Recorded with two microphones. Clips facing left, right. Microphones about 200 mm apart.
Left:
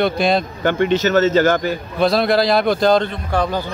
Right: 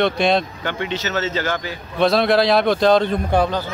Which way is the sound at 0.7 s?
50° left (ahead or behind).